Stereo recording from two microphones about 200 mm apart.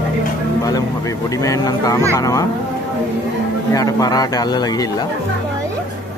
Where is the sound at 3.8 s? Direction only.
20° left (ahead or behind).